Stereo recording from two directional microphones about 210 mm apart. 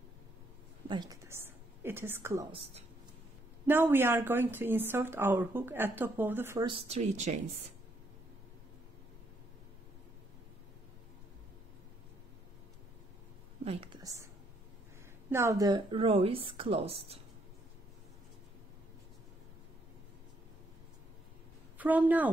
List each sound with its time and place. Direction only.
0.8 s a woman's voice: 20° right (ahead or behind)
3.6 s speech: 10° right (ahead or behind)
6.7 s speech: 30° right (ahead or behind)
13.7 s a woman's voice: 25° right (ahead or behind)
14.0 s a woman's voice: 15° right (ahead or behind)
21.7 s a woman's voice: 10° right (ahead or behind)